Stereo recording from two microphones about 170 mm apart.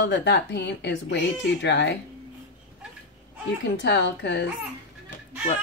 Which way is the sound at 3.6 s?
90° left.